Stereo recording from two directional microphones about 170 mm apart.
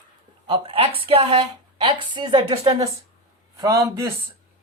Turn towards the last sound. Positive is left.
turn(degrees=-20)  # may be behind; listen again after turning